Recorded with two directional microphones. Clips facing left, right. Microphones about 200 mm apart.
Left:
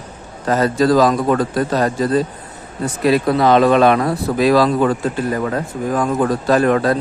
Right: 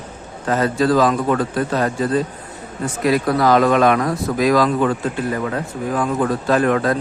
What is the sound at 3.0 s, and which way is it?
Speech, 25° left (ahead or behind).